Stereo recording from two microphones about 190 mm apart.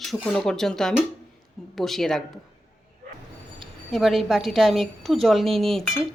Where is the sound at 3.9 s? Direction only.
Centre (ahead or behind).